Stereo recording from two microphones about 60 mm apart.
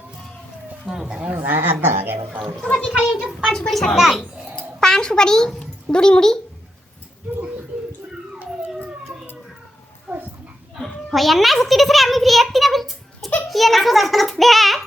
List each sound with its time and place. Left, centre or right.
1.0 s speech: centre
1.5 s a woman's voice: right
2.9 s speech: centre
3.7 s a child's voice: centre
3.9 s a child's voice: centre
4.8 s speech: centre
10.1 s dog: centre
10.8 s a sound: centre
13.5 s child singing: centre